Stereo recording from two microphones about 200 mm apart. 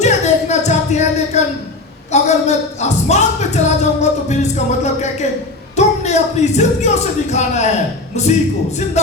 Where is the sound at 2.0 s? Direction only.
35° left (ahead or behind).